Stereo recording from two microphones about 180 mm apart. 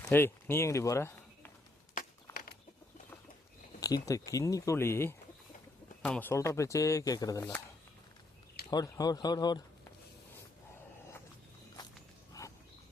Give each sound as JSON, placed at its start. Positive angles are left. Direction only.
{"t": 0.0, "sound": "speech", "side_deg": 10}
{"t": 3.8, "sound": "speech", "side_deg": 20}
{"t": 8.7, "sound": "speech", "side_deg": 20}
{"t": 12.4, "sound": "a sound", "side_deg": 20}